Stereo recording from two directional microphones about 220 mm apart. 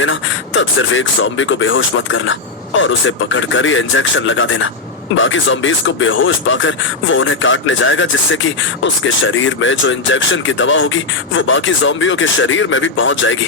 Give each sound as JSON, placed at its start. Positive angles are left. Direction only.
{"t": 0.0, "sound": "speech", "side_deg": 60}